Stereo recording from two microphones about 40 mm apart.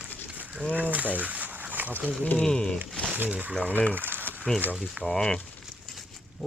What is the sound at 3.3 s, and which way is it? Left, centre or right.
Speech, right.